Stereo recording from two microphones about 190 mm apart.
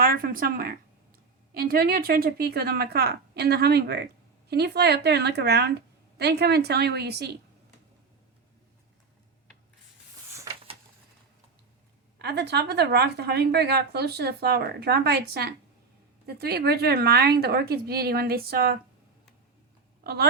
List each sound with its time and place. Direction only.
0.0 s a woman's voice: 50° right (ahead or behind)
10.5 s a sound: 15° right (ahead or behind)
12.2 s a woman's voice: 60° right (ahead or behind)